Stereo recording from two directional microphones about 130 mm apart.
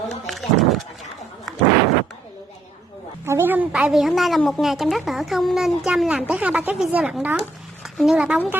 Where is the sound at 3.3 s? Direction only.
15° right (ahead or behind).